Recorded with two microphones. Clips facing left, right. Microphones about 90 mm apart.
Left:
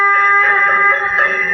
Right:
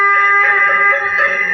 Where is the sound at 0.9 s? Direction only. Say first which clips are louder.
Even; 45° left (ahead or behind).